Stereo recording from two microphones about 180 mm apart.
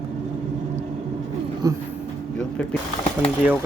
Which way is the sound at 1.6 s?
20° right (ahead or behind).